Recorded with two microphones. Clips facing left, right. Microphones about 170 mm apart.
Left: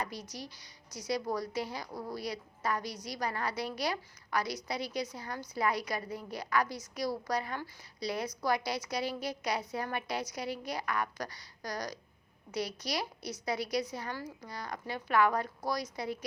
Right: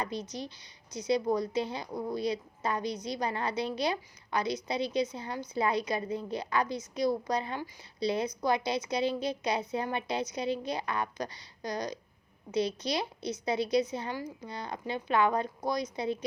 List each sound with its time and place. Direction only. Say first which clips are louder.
0.0 s a woman's voice: right 4 dB; 25° right (ahead or behind)